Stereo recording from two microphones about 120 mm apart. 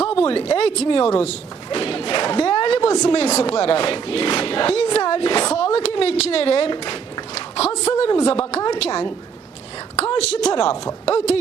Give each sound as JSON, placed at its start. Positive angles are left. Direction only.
{"t": 0.0, "sound": "speech", "side_deg": 55}
{"t": 7.3, "sound": "a sound", "side_deg": 60}
{"t": 7.9, "sound": "a woman's voice", "side_deg": 55}